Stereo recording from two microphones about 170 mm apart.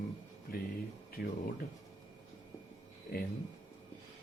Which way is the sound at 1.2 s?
55° left (ahead or behind).